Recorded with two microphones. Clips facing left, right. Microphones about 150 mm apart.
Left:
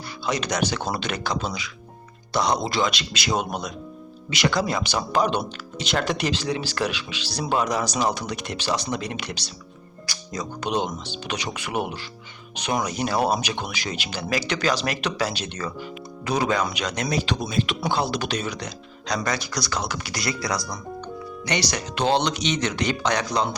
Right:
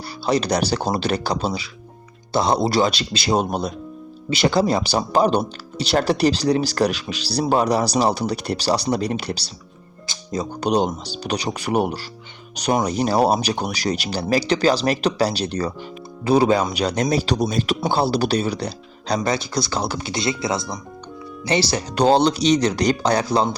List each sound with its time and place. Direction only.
0.3 s speech: 35° right (ahead or behind)